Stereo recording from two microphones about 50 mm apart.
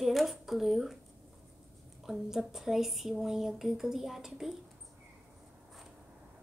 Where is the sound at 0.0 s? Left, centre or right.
Centre.